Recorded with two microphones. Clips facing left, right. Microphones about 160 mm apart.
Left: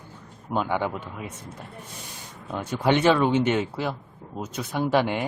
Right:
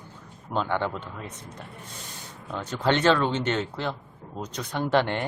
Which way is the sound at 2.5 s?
10° left (ahead or behind).